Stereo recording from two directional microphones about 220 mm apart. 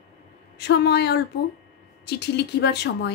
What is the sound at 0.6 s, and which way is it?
A woman's voice, 50° left (ahead or behind).